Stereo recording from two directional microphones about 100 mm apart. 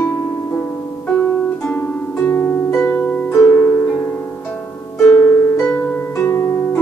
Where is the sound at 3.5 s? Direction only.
20° left (ahead or behind).